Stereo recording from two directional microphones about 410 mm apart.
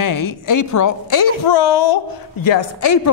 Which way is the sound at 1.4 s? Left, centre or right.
Left.